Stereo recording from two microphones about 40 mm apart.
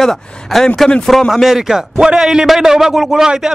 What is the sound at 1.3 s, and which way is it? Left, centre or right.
A man's voice, centre.